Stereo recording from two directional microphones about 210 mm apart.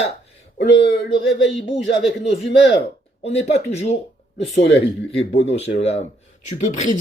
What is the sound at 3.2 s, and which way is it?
Speech, 30° left (ahead or behind).